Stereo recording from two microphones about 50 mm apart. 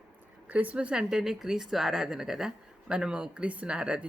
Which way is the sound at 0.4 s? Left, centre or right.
Right.